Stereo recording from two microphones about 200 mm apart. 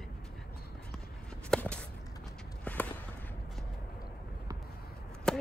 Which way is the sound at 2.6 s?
10° left (ahead or behind).